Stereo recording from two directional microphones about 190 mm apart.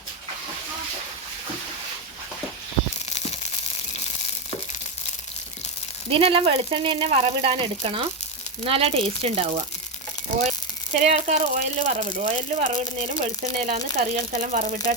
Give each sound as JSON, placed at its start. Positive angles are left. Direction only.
{"t": 3.1, "sound": "tearing", "side_deg": 35}
{"t": 6.1, "sound": "a woman's voice", "side_deg": -30}
{"t": 11.0, "sound": "speech", "side_deg": -35}